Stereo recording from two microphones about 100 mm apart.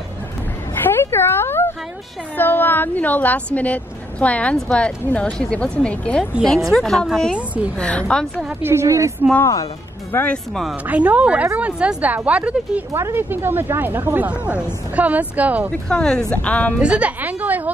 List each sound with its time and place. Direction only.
0.7 s a sound: 20° left (ahead or behind)
2.3 s a woman's voice: 20° left (ahead or behind)
7.3 s a woman's voice: 15° right (ahead or behind)
7.7 s a woman's voice: 10° left (ahead or behind)
8.6 s a woman's voice: 30° right (ahead or behind)
9.4 s speech: 35° left (ahead or behind)
10.1 s a woman's voice: 10° left (ahead or behind)
10.9 s a woman's voice: 15° right (ahead or behind)
12.9 s a woman's voice: 25° right (ahead or behind)
15.7 s a woman's voice: 10° left (ahead or behind)
16.8 s a woman's voice: 10° right (ahead or behind)